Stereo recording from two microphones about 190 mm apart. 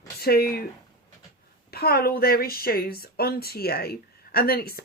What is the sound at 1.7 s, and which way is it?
Speech, 55° left (ahead or behind).